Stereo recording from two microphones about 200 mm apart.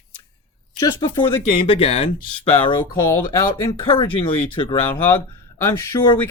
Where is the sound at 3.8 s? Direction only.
25° left (ahead or behind).